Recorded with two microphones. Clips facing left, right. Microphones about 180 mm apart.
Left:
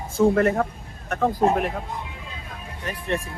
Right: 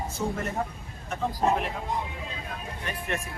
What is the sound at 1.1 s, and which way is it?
Speech, 55° left (ahead or behind).